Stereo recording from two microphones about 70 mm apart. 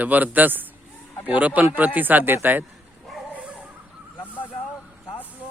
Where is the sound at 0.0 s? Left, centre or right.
Right.